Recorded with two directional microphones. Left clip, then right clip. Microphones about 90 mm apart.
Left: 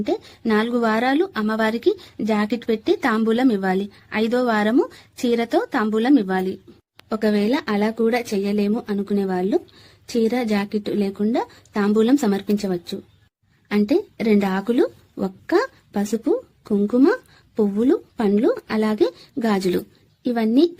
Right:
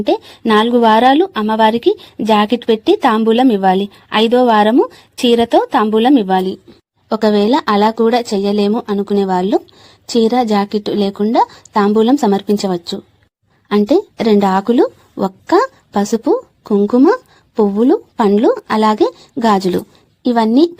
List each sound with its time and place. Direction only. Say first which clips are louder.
0.0 s a woman's voice: right 9 dB; 40° right (ahead or behind)
8.7 s a woman's voice: right 8 dB; 30° right (ahead or behind)
17.1 s a woman's voice: right 7 dB; 45° right (ahead or behind)